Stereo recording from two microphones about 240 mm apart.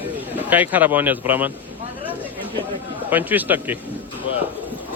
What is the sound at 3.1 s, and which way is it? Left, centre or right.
Speech, centre.